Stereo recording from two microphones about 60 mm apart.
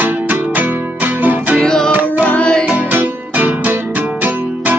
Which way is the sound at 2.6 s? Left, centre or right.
Right.